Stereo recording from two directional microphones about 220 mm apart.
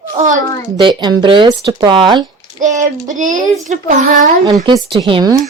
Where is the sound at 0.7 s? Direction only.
20° right (ahead or behind).